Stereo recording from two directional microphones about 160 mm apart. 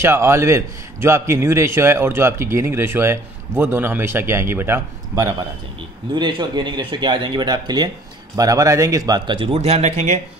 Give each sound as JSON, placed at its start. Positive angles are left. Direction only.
{"t": 0.0, "sound": "a man's voice", "side_deg": -15}